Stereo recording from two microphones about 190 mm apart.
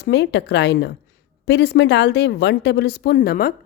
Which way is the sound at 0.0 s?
60° left (ahead or behind).